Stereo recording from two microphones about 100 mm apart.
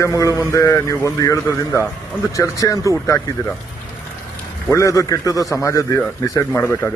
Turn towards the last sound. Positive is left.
turn(degrees=25)  # may be behind; listen again after turning